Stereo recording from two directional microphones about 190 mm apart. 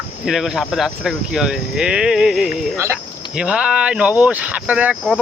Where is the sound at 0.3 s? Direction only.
Centre (ahead or behind).